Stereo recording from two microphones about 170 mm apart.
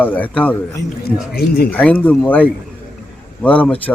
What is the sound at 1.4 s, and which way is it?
Speech, 65° left (ahead or behind).